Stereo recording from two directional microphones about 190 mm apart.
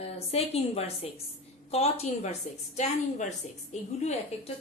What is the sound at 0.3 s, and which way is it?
A woman's voice, 30° left (ahead or behind).